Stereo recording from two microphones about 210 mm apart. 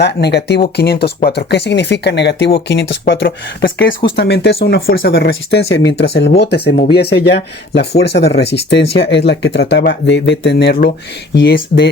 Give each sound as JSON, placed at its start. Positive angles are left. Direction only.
{"t": 0.0, "sound": "speech", "side_deg": 50}